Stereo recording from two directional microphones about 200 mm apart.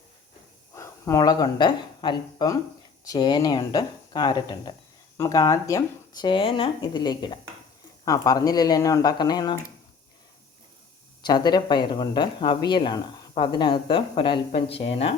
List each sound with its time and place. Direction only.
0.7 s speech: 15° left (ahead or behind)
11.2 s speech: 20° left (ahead or behind)